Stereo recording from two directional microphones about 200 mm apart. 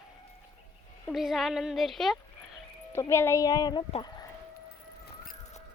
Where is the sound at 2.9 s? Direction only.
15° left (ahead or behind).